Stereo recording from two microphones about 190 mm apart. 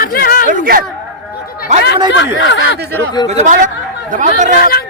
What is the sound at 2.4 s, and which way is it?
Speech, 75° left (ahead or behind).